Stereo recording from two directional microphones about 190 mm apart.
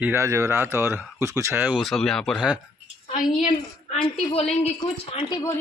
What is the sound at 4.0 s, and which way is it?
Speech, 25° left (ahead or behind).